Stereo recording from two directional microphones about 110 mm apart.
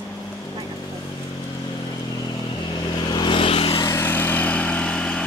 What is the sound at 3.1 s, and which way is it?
Vehicle, 50° left (ahead or behind).